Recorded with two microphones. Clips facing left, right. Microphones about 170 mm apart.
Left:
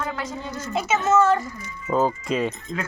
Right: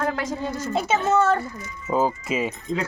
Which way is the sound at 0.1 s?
40° right (ahead or behind).